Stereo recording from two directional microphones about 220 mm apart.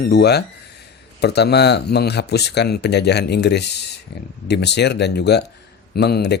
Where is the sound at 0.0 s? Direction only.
45° left (ahead or behind).